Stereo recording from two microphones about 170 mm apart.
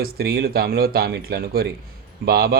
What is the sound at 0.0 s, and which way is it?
Speech, 65° right (ahead or behind).